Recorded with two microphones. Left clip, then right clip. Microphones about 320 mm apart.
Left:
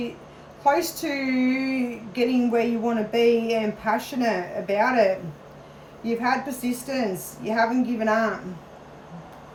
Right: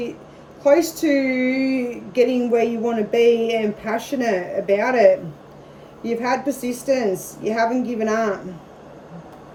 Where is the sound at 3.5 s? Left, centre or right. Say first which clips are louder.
Right 2 dB; centre.